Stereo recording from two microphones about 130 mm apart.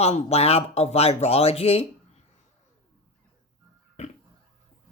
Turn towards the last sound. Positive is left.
turn(degrees=55)  # may be behind; listen again after turning